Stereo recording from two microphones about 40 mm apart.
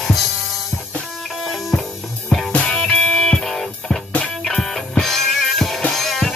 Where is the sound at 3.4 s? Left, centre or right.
Centre.